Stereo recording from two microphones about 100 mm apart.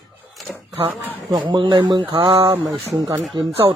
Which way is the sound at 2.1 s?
65° right (ahead or behind).